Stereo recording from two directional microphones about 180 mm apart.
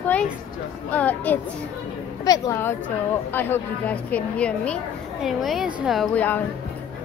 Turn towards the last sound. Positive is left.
turn(degrees=10)  # may be behind; listen again after turning